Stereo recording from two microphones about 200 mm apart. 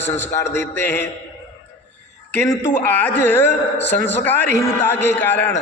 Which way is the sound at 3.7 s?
60° left (ahead or behind).